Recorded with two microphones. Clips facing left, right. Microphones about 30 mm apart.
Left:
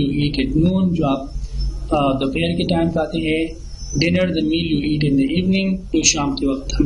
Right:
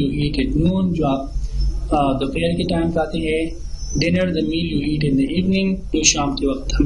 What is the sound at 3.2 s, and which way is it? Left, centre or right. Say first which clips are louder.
Speech: left 1 dB; left.